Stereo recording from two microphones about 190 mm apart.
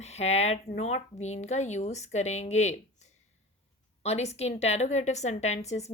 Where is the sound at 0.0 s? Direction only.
35° left (ahead or behind).